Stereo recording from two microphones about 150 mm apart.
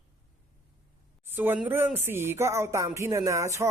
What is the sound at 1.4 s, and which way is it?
Speech, 10° right (ahead or behind).